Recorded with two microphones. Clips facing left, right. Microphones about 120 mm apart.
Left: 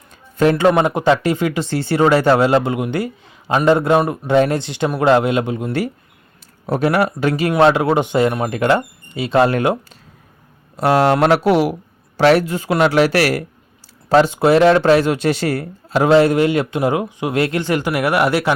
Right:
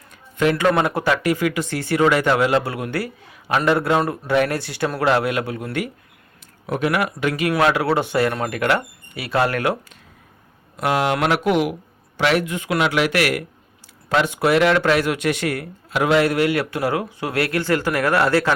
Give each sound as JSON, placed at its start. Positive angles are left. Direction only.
{"t": 0.3, "sound": "speech", "side_deg": 30}
{"t": 0.7, "sound": "speech", "side_deg": 20}
{"t": 6.7, "sound": "speech", "side_deg": 35}
{"t": 10.8, "sound": "speech", "side_deg": 35}